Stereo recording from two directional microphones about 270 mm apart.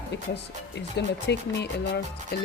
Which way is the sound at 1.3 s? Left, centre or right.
Left.